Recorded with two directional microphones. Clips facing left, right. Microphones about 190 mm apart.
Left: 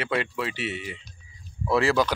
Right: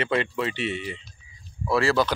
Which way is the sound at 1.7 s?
15° left (ahead or behind).